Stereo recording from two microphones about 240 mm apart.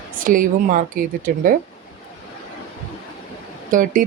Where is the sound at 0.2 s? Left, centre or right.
Right.